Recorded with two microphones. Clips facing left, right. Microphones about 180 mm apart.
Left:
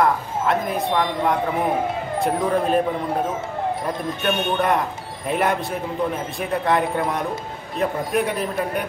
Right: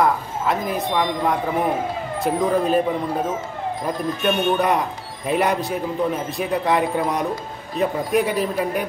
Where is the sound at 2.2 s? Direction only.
Centre (ahead or behind).